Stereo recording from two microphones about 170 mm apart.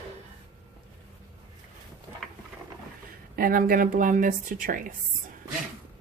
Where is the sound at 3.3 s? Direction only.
55° right (ahead or behind).